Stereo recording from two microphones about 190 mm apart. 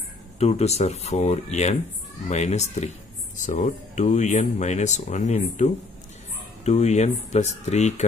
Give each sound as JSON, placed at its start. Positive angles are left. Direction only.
{"t": 0.4, "sound": "speech", "side_deg": 35}